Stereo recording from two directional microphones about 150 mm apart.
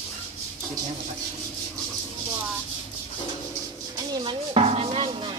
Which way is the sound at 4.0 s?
35° right (ahead or behind).